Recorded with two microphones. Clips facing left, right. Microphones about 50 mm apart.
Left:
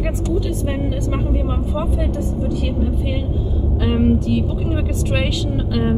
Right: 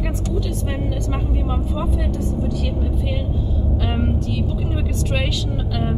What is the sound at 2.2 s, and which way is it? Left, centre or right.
Speech, left.